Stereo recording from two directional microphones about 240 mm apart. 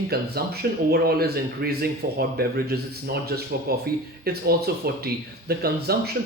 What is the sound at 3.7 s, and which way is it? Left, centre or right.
Speech, right.